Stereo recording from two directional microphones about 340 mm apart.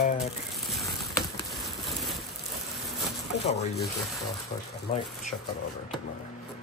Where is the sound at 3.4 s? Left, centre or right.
Centre.